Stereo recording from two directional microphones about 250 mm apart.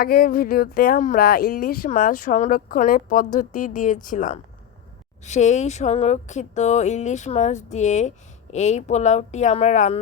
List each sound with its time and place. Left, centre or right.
0.0 s speech: left